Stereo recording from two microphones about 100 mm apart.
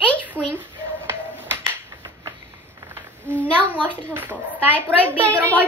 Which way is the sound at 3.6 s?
15° right (ahead or behind).